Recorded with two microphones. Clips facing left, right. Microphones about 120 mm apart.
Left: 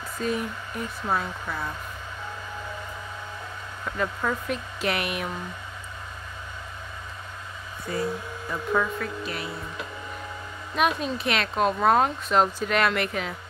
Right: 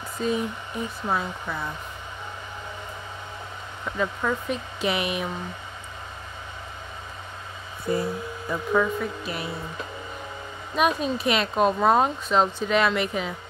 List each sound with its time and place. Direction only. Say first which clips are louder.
0.2 s speech: right 2 dB; 10° right (ahead or behind)
3.8 s speech: right 1 dB; 5° right (ahead or behind)
7.9 s music: right 5 dB; 20° right (ahead or behind)
8.5 s speech: right 3 dB; 5° right (ahead or behind)
10.8 s speech: right 2 dB; 5° right (ahead or behind)